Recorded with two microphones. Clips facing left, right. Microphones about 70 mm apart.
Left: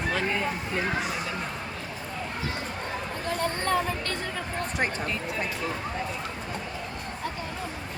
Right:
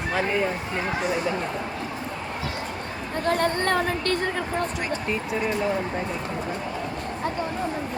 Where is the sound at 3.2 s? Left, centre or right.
Right.